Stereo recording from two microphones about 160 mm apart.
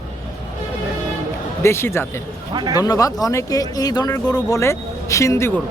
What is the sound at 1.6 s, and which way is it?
Speech, 15° left (ahead or behind).